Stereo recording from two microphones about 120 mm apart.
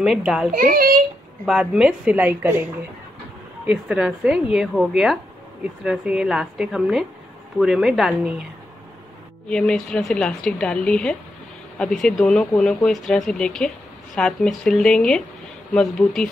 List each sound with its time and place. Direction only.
0.0 s a woman's voice: 5° right (ahead or behind)
9.5 s a woman's voice: 5° left (ahead or behind)